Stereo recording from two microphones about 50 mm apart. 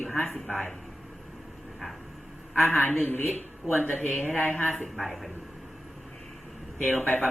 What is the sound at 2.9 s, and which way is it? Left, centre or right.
Speech, left.